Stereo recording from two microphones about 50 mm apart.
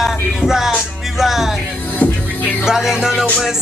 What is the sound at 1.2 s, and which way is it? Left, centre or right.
Music, centre.